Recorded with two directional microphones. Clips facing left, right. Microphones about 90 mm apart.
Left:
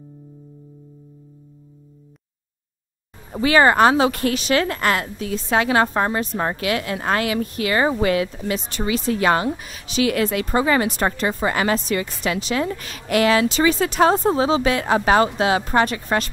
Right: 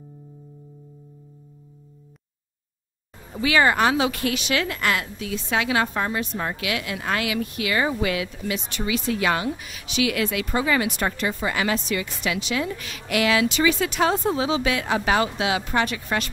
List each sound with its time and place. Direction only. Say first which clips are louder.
3.3 s speech: left 5 dB; 40° left (ahead or behind)